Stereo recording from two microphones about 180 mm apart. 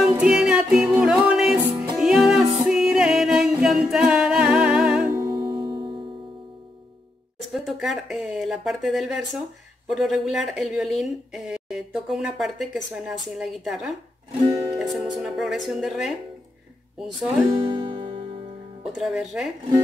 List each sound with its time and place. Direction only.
0.0 s music: 5° right (ahead or behind)
2.6 s singing: 5° right (ahead or behind)
5.2 s music: 25° right (ahead or behind)
7.5 s a woman's voice: centre (ahead or behind)
17.5 s music: 30° right (ahead or behind)
18.8 s a woman's voice: centre (ahead or behind)